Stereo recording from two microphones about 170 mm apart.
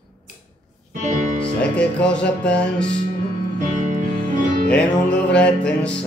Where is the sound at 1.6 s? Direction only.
5° left (ahead or behind).